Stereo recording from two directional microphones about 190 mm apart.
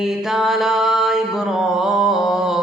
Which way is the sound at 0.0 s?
Centre (ahead or behind).